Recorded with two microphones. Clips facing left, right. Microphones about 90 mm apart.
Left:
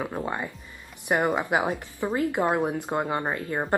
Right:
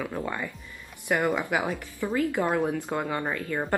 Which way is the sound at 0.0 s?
25° left (ahead or behind).